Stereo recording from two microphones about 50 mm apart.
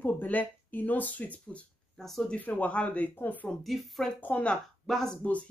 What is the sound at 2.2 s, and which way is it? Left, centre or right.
Speech, left.